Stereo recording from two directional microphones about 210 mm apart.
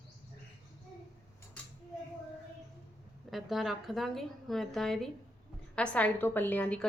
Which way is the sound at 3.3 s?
Centre (ahead or behind).